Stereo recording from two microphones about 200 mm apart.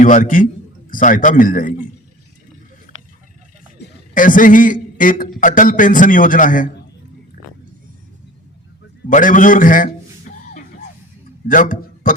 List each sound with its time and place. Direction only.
0.0 s a man's voice: 40° left (ahead or behind)
2.9 s a sound: 40° left (ahead or behind)
3.8 s a man's voice: 45° left (ahead or behind)
9.0 s a man's voice: 40° left (ahead or behind)
10.3 s music: 40° left (ahead or behind)
11.4 s a man's voice: 40° left (ahead or behind)